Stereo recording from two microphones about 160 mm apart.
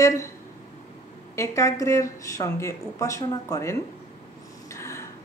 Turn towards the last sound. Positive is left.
turn(degrees=20)  # may be behind; listen again after turning